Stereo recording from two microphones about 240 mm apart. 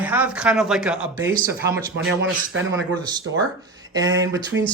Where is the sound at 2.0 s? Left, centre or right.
Right.